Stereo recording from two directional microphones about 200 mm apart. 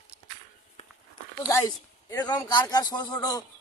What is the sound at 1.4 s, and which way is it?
Speech, 15° left (ahead or behind).